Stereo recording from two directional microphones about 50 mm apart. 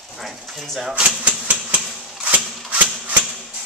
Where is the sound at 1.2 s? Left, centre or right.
Right.